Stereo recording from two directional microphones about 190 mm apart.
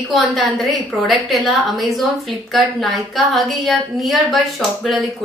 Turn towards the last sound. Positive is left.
turn(degrees=0)  # may be behind; listen again after turning